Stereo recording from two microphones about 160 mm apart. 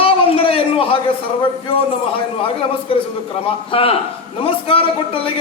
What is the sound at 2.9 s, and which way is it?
A man's voice, 35° left (ahead or behind).